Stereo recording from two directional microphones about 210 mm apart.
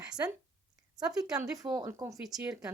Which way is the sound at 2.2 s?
5° right (ahead or behind).